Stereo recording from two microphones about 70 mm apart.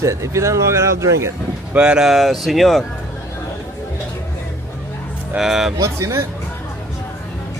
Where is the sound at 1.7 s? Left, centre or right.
Centre.